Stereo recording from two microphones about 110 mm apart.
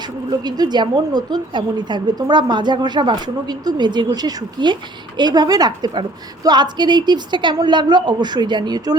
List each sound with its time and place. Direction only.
0.3 s a woman's voice: 40° right (ahead or behind)